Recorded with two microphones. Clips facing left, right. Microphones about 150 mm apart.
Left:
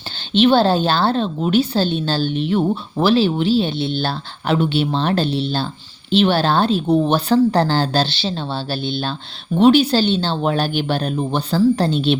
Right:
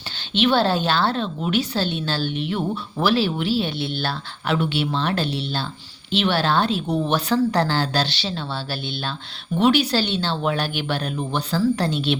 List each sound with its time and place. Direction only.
0.3 s a woman's voice: 30° left (ahead or behind)